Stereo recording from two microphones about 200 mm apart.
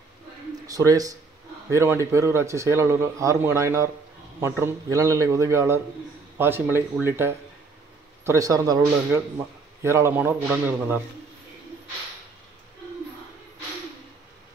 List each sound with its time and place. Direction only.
0.7 s a man's voice: 15° right (ahead or behind)